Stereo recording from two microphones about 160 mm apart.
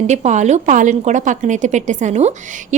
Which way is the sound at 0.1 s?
45° right (ahead or behind).